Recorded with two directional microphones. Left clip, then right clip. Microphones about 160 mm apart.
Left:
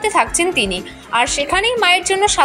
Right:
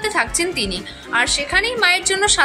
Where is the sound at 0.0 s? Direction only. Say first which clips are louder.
Left 4 dB; 20° left (ahead or behind).